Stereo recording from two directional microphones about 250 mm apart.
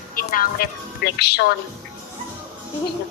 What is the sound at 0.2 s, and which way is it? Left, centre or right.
A woman's voice, left.